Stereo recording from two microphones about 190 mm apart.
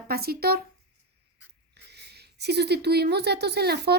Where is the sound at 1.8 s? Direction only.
60° right (ahead or behind).